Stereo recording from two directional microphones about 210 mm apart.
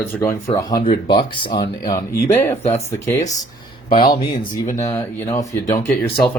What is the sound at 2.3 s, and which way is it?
Speech, 10° left (ahead or behind).